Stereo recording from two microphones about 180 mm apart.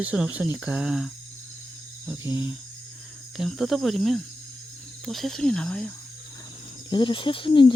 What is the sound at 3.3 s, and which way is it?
Speech, centre (ahead or behind).